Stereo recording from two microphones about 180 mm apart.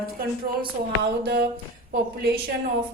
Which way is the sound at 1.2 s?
60° right (ahead or behind).